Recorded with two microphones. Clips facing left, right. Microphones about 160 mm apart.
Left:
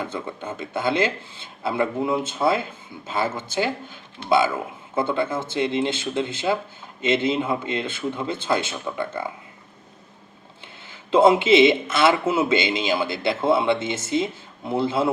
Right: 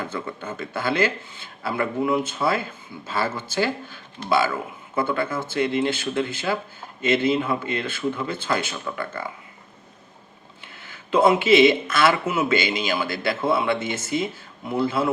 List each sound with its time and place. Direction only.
0.0 s speech: 20° left (ahead or behind)
10.6 s speech: 25° left (ahead or behind)